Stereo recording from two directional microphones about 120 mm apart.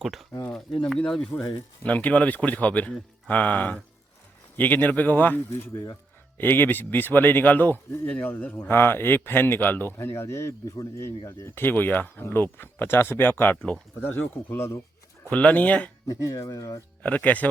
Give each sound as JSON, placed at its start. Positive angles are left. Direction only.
{"t": 0.0, "sound": "a man's voice", "side_deg": 0}
{"t": 16.0, "sound": "speech", "side_deg": 30}
{"t": 17.0, "sound": "a man's voice", "side_deg": 10}